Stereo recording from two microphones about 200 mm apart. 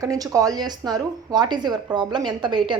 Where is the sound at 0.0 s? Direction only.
15° right (ahead or behind).